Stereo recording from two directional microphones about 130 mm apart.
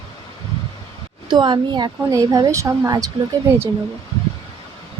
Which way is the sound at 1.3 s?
35° right (ahead or behind).